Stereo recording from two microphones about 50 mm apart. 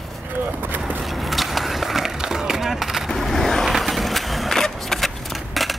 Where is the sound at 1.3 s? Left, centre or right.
Centre.